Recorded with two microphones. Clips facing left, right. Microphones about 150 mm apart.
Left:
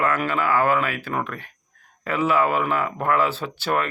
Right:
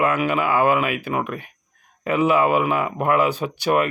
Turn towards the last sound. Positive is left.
turn(degrees=-15)  # may be behind; listen again after turning